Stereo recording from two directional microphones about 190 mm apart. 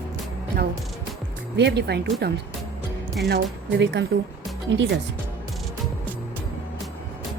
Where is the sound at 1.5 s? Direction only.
60° right (ahead or behind).